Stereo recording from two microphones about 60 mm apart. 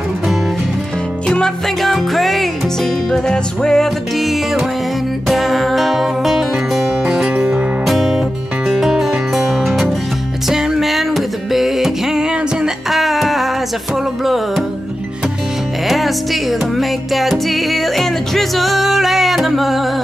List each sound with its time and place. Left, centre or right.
1.2 s music: centre
1.8 s music: centre
7.8 s music: centre
15.9 s music: centre